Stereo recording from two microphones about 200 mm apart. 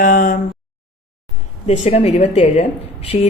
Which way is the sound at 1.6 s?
35° left (ahead or behind).